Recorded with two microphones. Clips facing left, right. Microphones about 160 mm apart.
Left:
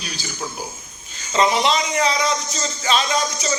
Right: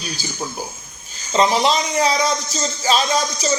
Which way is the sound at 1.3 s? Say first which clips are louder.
Right 1 dB; 35° right (ahead or behind).